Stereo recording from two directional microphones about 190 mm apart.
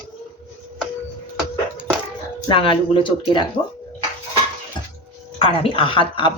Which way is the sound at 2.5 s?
25° left (ahead or behind).